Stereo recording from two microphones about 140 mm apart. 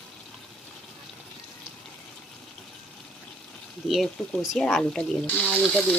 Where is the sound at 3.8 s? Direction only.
Centre (ahead or behind).